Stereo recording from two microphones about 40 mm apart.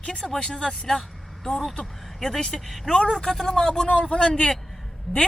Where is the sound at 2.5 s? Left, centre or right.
Centre.